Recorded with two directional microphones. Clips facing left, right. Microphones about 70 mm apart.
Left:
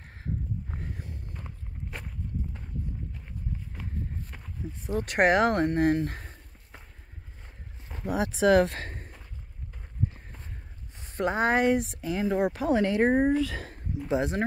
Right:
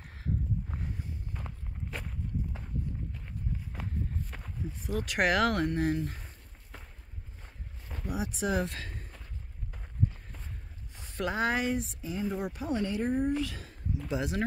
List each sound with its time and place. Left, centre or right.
0.0 s a sound: left
1.5 s walk: centre
4.6 s speech: centre
5.0 s speech: left
5.3 s speech: left
8.2 s speech: left
8.6 s speech: left
11.0 s speech: left
11.6 s speech: left
14.1 s speech: left